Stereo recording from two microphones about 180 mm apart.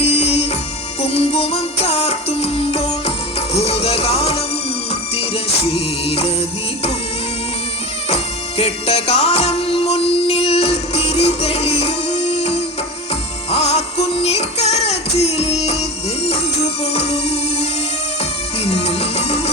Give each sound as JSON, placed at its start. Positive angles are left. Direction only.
{"t": 0.0, "sound": "music", "side_deg": 35}
{"t": 5.6, "sound": "music", "side_deg": 30}
{"t": 8.1, "sound": "music", "side_deg": 35}
{"t": 16.9, "sound": "music", "side_deg": 35}